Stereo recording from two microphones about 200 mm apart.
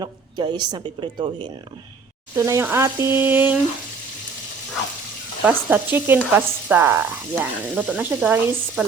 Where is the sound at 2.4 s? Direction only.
15° right (ahead or behind).